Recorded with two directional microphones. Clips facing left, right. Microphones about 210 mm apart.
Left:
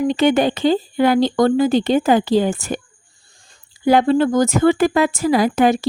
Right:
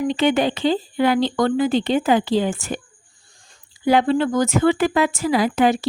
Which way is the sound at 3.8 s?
45° left (ahead or behind).